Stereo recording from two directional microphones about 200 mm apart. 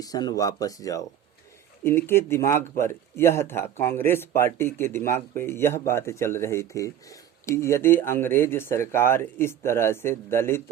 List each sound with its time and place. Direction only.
0.0 s speech: 20° left (ahead or behind)